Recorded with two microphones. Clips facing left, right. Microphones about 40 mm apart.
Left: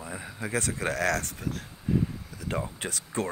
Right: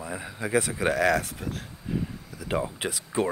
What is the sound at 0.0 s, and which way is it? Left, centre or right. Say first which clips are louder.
Speech: right 3 dB; centre.